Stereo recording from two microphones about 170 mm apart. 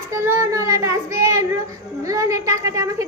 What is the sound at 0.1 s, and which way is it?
Child singing, 15° right (ahead or behind).